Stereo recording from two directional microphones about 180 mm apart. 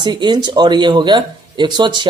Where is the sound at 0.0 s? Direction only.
25° right (ahead or behind).